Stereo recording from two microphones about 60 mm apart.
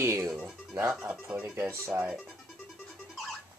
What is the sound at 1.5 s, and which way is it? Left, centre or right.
Speech, right.